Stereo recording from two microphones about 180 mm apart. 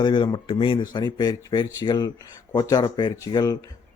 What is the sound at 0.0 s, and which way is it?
Speech, 25° left (ahead or behind).